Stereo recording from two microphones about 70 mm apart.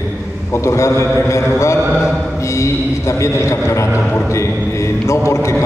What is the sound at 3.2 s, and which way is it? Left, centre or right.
Speech, left.